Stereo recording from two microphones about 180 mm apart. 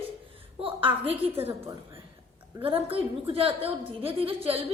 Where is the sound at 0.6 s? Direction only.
30° right (ahead or behind).